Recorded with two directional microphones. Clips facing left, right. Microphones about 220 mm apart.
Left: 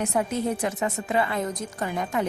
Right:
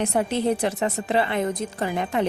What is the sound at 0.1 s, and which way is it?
A woman's voice, 30° right (ahead or behind).